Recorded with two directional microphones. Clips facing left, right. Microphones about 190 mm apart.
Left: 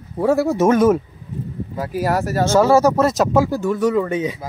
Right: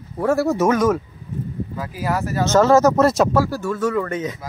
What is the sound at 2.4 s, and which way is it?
Speech, 10° left (ahead or behind).